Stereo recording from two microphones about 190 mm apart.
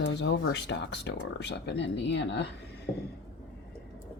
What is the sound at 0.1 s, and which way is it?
Speech, 65° left (ahead or behind).